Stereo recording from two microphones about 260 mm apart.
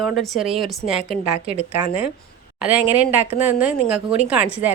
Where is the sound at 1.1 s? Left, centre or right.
Right.